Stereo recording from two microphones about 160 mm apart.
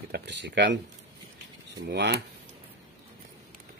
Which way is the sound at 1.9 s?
90° right.